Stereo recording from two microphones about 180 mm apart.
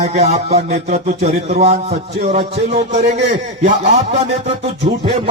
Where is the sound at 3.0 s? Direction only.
65° right (ahead or behind).